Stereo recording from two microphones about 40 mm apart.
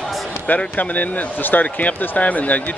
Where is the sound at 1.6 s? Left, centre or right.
Left.